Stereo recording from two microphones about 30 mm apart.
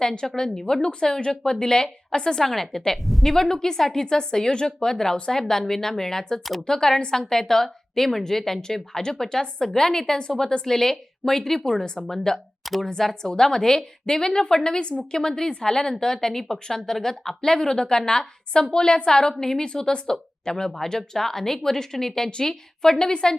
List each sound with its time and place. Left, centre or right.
0.0 s a woman's voice: left
2.4 s a woman's voice: centre
3.0 s speech: centre
3.2 s a woman's voice: centre
13.2 s a woman's voice: left
20.7 s a woman's voice: centre